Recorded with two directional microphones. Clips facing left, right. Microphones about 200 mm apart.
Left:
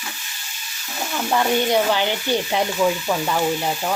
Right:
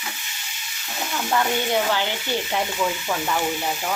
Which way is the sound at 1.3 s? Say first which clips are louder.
Left 4 dB; 20° left (ahead or behind).